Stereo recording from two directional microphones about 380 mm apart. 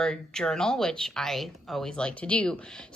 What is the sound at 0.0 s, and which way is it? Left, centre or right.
A woman's voice, centre.